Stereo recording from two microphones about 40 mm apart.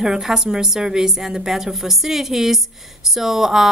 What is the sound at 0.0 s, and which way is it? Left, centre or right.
Speech, centre.